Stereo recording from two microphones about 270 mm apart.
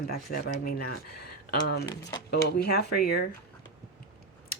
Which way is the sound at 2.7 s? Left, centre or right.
Left.